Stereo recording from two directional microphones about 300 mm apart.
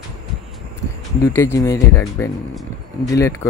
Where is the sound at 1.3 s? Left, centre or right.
Centre.